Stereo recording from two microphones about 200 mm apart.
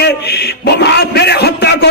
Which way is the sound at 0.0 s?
55° left (ahead or behind).